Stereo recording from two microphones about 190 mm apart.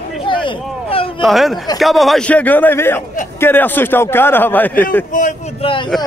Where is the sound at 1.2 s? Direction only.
Centre (ahead or behind).